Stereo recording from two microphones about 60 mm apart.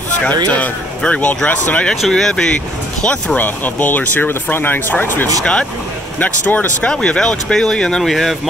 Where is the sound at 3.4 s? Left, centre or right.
Left.